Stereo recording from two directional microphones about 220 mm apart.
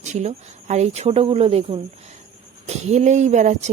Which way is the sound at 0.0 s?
30° right (ahead or behind).